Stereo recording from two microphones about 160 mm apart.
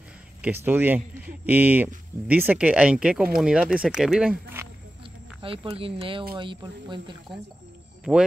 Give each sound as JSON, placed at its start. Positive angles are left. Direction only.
{"t": 0.4, "sound": "speech", "side_deg": -10}
{"t": 5.4, "sound": "speech", "side_deg": -35}